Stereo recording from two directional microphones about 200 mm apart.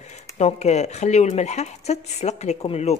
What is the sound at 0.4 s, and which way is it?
Speech, 35° left (ahead or behind).